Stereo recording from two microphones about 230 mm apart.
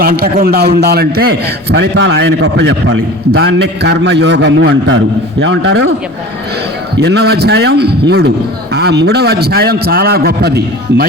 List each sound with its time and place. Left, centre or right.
0.0 s a man's voice: right
6.9 s a man's voice: right